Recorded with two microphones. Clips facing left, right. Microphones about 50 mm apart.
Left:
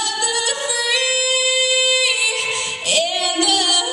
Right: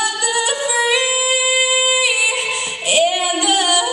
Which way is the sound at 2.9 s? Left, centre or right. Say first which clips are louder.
Right 4 dB; centre.